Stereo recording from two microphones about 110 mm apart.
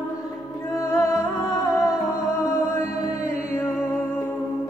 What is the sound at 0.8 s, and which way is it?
Music, 30° left (ahead or behind).